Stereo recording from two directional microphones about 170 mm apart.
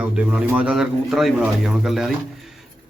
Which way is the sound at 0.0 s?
5° right (ahead or behind).